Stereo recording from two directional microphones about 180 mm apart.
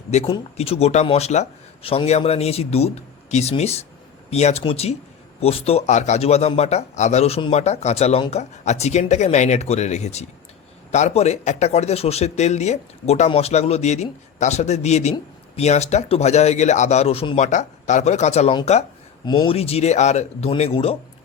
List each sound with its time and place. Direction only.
0.1 s a man's voice: 35° left (ahead or behind)
19.2 s a man's voice: 25° left (ahead or behind)